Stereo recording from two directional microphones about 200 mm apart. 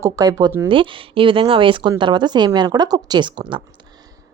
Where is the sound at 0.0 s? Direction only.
20° right (ahead or behind).